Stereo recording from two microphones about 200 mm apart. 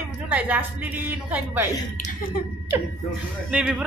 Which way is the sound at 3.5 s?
5° right (ahead or behind).